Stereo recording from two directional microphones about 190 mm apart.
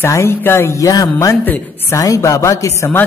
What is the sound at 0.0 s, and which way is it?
A man's voice, 15° left (ahead or behind).